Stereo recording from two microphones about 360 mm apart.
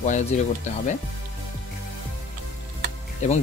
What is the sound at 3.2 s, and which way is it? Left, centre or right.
Speech, centre.